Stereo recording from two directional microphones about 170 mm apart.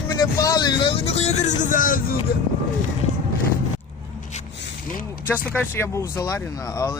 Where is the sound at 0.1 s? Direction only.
20° left (ahead or behind); by 2.1 s 55° left (ahead or behind).